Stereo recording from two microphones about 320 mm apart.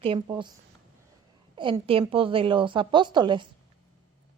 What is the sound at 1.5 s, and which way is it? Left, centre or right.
A woman's voice, centre.